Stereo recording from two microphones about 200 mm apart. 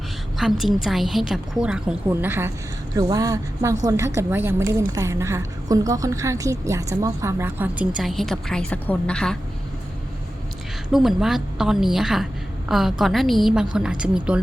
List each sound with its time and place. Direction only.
0.6 s a woman's voice: centre (ahead or behind)
10.9 s a woman's voice: centre (ahead or behind)